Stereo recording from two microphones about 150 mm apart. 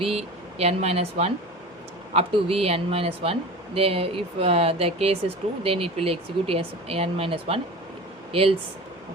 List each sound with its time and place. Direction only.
0.0 s speech: 40° right (ahead or behind)